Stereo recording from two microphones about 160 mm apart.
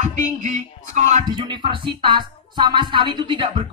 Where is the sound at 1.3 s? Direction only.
30° right (ahead or behind).